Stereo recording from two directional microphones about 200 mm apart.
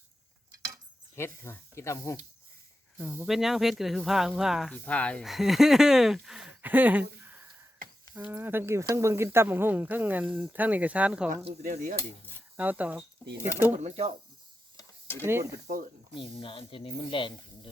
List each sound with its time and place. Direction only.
1.1 s speech: 10° left (ahead or behind)
3.0 s speech: 5° right (ahead or behind)
11.6 s speech: 40° right (ahead or behind)
12.5 s speech: 10° right (ahead or behind)
13.7 s speech: 35° right (ahead or behind)
14.8 s stir: 10° left (ahead or behind)
15.3 s speech: 10° right (ahead or behind)
16.1 s speech: 25° left (ahead or behind)